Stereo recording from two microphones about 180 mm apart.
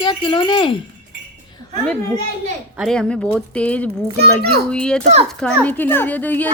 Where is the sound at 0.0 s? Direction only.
25° left (ahead or behind).